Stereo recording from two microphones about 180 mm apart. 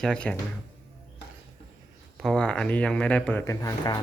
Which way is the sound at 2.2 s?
5° left (ahead or behind).